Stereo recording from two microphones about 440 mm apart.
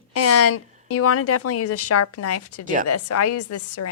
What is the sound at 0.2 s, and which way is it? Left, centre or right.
Speech, left.